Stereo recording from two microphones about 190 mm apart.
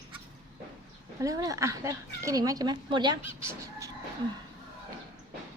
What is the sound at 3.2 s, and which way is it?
Chicken, 15° right (ahead or behind).